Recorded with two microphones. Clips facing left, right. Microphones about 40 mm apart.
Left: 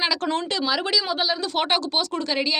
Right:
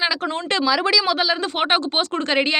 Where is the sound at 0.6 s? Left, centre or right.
Right.